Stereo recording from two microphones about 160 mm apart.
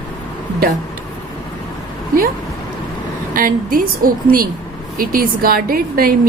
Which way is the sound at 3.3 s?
60° right (ahead or behind).